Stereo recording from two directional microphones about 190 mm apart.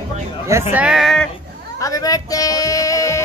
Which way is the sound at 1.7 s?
20° left (ahead or behind).